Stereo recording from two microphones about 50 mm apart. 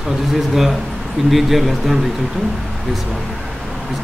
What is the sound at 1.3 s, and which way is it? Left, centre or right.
Speech, centre.